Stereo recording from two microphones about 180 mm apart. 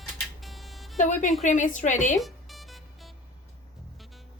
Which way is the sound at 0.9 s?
45° left (ahead or behind).